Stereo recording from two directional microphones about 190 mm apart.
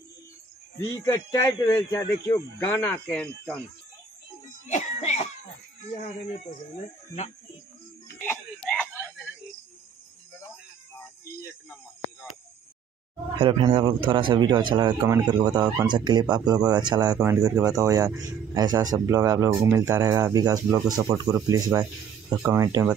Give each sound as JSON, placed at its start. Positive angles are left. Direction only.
{"t": 1.0, "sound": "speech", "side_deg": 15}
{"t": 4.6, "sound": "cough", "side_deg": 40}
{"t": 8.2, "sound": "a sound", "side_deg": 10}
{"t": 13.4, "sound": "speech", "side_deg": -25}